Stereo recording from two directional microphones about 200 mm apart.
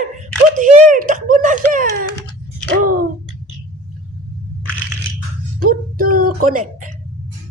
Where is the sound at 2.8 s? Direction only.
45° right (ahead or behind).